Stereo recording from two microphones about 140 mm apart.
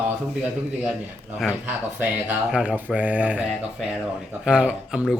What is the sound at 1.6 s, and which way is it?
Speech, 15° right (ahead or behind).